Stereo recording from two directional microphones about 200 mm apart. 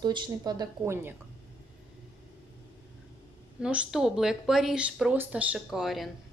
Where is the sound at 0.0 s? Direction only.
20° right (ahead or behind).